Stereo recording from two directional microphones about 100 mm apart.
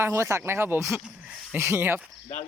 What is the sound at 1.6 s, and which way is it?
Speech, 25° right (ahead or behind).